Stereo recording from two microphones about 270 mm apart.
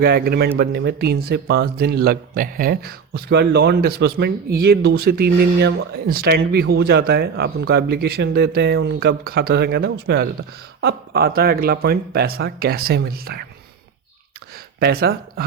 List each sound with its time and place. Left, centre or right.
0.0 s speech: right
14.8 s speech: right